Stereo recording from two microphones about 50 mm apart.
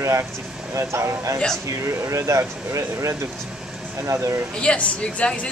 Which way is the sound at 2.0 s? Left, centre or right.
Right.